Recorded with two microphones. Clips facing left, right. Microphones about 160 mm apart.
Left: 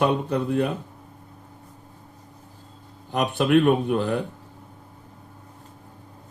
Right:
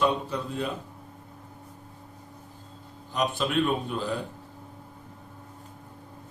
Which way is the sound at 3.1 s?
60° left (ahead or behind).